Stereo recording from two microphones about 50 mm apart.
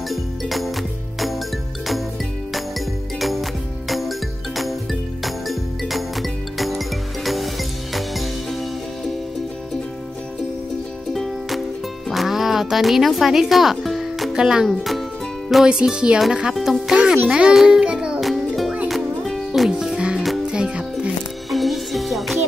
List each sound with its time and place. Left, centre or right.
0.1 s music: centre
3.2 s music: centre
5.2 s music: centre
7.9 s music: centre
12.1 s music: centre
14.3 s speech: centre
14.7 s speech: centre
15.6 s speech: centre
16.5 s speech: centre
16.9 s a child's voice: centre
18.2 s music: centre
20.0 s music: centre
21.5 s music: centre